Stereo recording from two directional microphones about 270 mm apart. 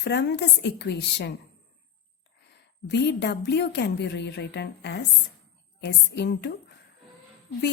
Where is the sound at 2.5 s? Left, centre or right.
Left.